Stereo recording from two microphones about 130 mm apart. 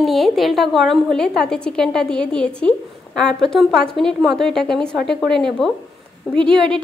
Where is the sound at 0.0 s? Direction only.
Centre (ahead or behind).